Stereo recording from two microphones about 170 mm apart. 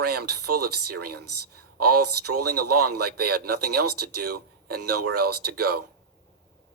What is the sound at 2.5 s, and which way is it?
Speech, 65° right (ahead or behind).